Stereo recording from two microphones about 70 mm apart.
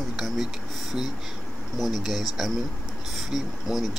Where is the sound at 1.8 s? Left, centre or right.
Centre.